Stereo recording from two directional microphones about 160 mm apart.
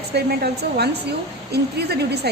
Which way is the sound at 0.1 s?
90° right.